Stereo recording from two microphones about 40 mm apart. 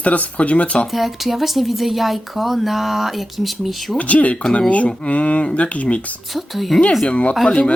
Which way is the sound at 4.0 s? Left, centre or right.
Left.